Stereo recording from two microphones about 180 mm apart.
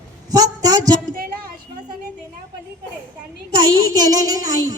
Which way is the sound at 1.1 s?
55° right (ahead or behind).